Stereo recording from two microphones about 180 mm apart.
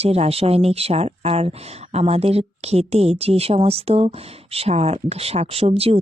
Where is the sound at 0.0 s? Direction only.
35° right (ahead or behind).